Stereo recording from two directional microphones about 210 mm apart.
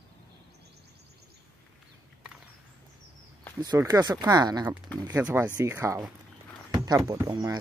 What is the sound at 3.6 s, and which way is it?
Speech, 15° right (ahead or behind).